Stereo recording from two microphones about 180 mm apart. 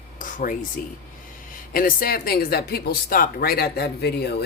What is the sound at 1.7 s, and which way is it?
Speech, 50° left (ahead or behind).